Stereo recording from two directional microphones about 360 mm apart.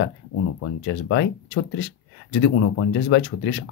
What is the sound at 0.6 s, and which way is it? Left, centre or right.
Speech, left.